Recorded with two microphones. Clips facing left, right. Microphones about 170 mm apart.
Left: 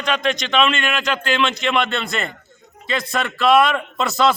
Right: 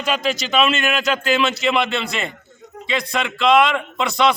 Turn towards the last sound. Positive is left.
turn(degrees=5)  # may be behind; listen again after turning